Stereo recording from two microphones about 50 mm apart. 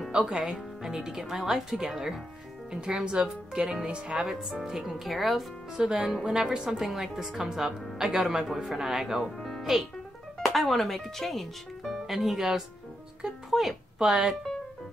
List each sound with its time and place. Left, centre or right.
0.3 s speech: centre
2.7 s speech: centre
4.1 s speech: centre
6.8 s speech: centre
9.6 s music: centre
10.4 s speech: centre